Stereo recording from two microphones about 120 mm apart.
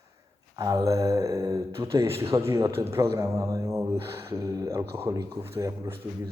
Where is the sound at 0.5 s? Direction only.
30° right (ahead or behind).